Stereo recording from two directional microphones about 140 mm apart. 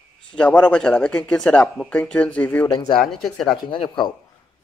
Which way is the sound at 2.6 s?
25° left (ahead or behind).